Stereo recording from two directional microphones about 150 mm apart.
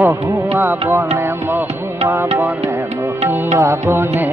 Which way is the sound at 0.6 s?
15° right (ahead or behind).